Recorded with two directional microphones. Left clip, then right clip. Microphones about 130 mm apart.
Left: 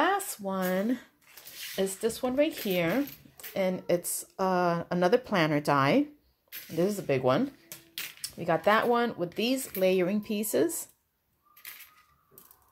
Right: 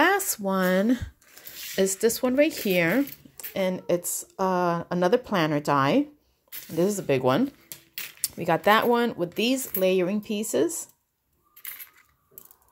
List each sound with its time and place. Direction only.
0.0 s speech: 65° right (ahead or behind); by 1.0 s 50° right (ahead or behind)
1.8 s speech: 60° right (ahead or behind)
3.5 s speech: 35° right (ahead or behind); by 6.0 s 20° right (ahead or behind)
6.7 s speech: 35° right (ahead or behind)
8.2 s speech: 50° right (ahead or behind); by 10.9 s 20° right (ahead or behind)